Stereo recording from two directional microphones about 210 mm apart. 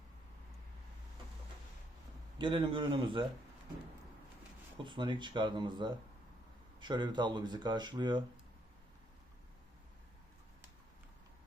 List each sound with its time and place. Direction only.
2.4 s speech: 25° right (ahead or behind)
4.8 s speech: 20° right (ahead or behind)